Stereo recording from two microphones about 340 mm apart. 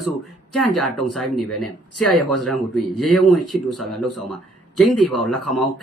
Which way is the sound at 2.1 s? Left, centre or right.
Centre.